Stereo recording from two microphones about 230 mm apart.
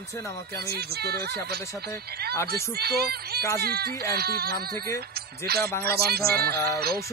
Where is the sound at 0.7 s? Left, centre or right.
Right.